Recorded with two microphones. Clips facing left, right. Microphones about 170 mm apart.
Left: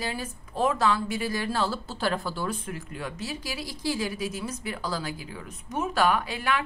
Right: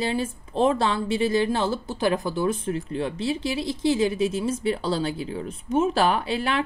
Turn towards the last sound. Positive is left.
turn(degrees=-30)  # may be behind; listen again after turning